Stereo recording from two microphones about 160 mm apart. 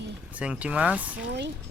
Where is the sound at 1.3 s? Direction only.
90° right.